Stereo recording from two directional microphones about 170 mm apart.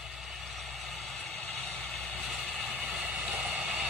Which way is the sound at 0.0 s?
Centre (ahead or behind).